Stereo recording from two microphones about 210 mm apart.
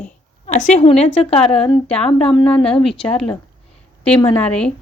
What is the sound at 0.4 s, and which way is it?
A woman's voice, 35° left (ahead or behind).